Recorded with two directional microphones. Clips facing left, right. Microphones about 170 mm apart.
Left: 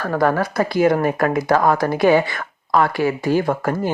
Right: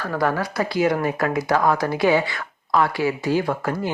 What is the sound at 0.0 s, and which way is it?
Speech, 50° left (ahead or behind).